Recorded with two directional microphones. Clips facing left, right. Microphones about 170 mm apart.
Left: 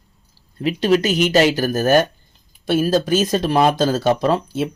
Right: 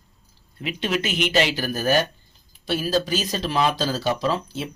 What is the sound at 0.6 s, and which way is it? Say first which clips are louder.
Speech: left 9 dB; 40° left (ahead or behind).